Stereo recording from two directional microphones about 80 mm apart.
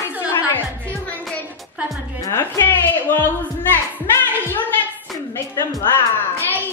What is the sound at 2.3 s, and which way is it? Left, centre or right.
A woman's voice, left.